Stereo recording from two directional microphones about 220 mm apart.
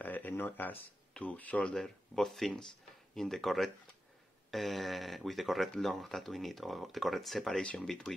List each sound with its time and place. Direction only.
0.0 s speech: 10° left (ahead or behind)